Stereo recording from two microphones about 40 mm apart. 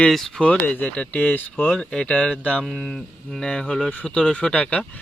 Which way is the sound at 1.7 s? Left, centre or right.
Left.